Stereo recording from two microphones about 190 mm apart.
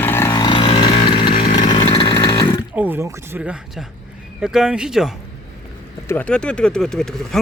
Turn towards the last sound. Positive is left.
turn(degrees=5)  # may be behind; listen again after turning